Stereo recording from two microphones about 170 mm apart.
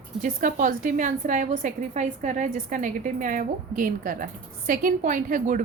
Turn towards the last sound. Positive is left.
turn(degrees=-50)  # may be behind; listen again after turning